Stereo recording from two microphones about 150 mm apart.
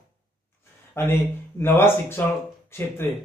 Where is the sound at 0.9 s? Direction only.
15° left (ahead or behind).